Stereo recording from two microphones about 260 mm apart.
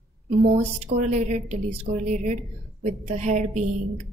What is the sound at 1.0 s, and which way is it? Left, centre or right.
Speech, right.